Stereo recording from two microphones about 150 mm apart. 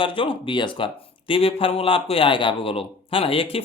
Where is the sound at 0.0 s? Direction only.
35° left (ahead or behind).